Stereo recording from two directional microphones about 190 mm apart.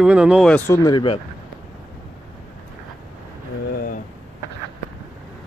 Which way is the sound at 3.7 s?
50° left (ahead or behind).